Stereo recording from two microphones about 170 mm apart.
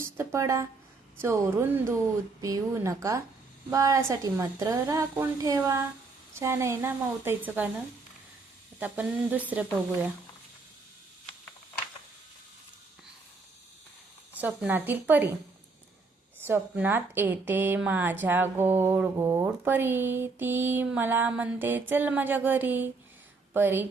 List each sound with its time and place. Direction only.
0.0 s a woman's voice: 15° right (ahead or behind)
8.8 s speech: 10° right (ahead or behind)
14.4 s speech: 10° right (ahead or behind)
16.4 s speech: 10° right (ahead or behind)